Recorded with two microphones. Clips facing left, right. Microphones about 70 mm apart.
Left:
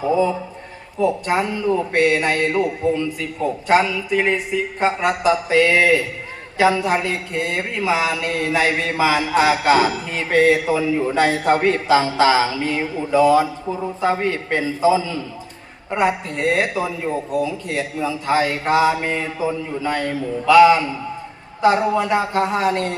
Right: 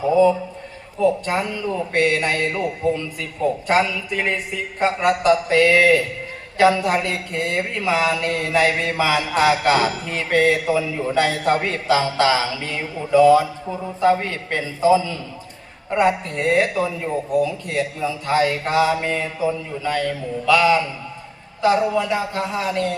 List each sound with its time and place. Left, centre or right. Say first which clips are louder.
0.9 s speech: left 1 dB; centre
11.3 s mantra: left 2 dB; left
11.6 s speech: left 3 dB; centre
12.2 s mantra: left 3 dB; centre
13.0 s a man's voice: right 2 dB; centre
19.0 s speech: even; centre
21.6 s a man's voice: left 1 dB; left